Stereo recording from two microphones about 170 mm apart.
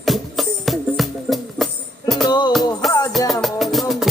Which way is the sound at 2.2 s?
25° left (ahead or behind).